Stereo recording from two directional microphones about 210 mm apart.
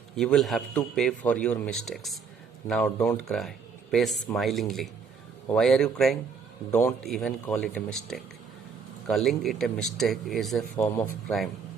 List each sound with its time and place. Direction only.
0.2 s speech: centre (ahead or behind)
6.7 s a man's voice: 10° left (ahead or behind)
7.0 s speech: centre (ahead or behind)